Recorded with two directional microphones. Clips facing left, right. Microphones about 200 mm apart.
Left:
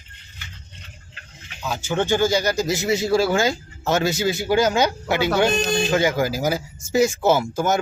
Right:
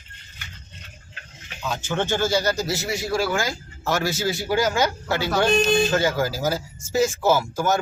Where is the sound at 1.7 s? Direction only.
10° left (ahead or behind).